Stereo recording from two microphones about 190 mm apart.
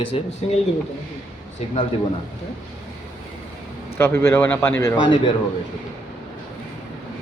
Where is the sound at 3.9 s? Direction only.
15° left (ahead or behind).